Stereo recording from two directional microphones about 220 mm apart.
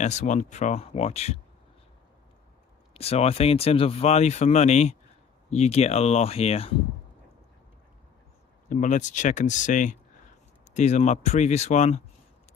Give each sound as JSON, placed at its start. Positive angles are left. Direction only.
{"t": 0.0, "sound": "speech", "side_deg": 35}
{"t": 2.9, "sound": "speech", "side_deg": 25}
{"t": 8.6, "sound": "speech", "side_deg": 35}